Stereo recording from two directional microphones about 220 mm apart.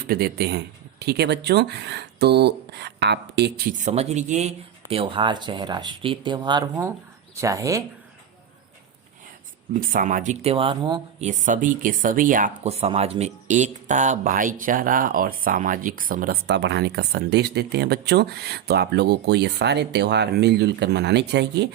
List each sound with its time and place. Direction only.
0.1 s speech: 45° right (ahead or behind)
3.8 s speech: 30° right (ahead or behind); by 7.9 s 15° right (ahead or behind)
9.7 s speech: 35° right (ahead or behind); by 11.0 s 20° right (ahead or behind)
11.2 s speech: 35° right (ahead or behind); by 21.7 s 50° right (ahead or behind)